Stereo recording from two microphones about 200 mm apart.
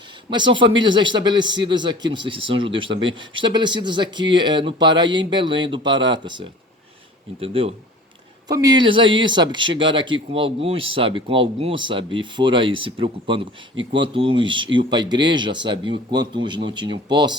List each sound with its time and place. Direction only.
0.3 s speech: 25° right (ahead or behind)